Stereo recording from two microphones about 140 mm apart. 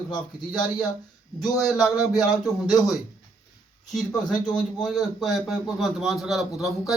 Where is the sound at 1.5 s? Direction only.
Centre (ahead or behind).